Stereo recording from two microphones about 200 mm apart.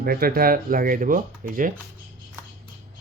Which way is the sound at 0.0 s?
50° right (ahead or behind).